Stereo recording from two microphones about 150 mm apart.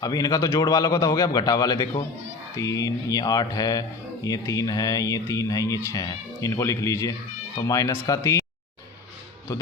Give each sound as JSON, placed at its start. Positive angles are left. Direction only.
{"t": 0.0, "sound": "a man's voice", "side_deg": 25}